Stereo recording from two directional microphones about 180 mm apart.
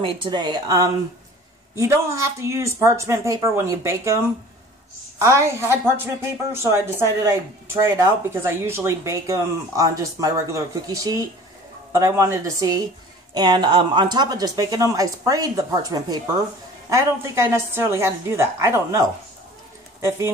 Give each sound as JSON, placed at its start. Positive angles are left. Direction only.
{"t": 0.0, "sound": "speech", "side_deg": -25}
{"t": 5.2, "sound": "speech", "side_deg": -15}